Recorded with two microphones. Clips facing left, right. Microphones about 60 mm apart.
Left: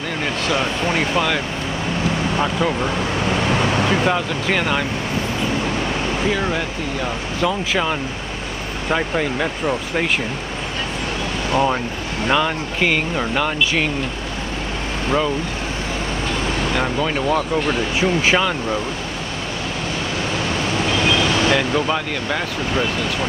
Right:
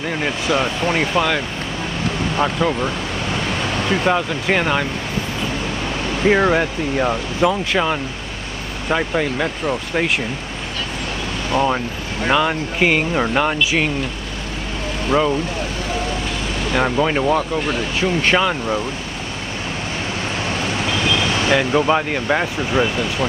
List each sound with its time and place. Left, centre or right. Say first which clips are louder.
0.2 s speech: right 1 dB; centre
3.9 s speech: right 1 dB; centre
6.2 s speech: right 9 dB; right
7.7 s speech: right 1 dB; centre
11.5 s speech: right 1 dB; centre
15.0 s speech: right 3 dB; centre
16.7 s speech: right 6 dB; centre
17.6 s speech: left 1 dB; centre
18.4 s speech: right 1 dB; centre
20.9 s vehicle: left 2 dB; left
21.5 s speech: right 3 dB; centre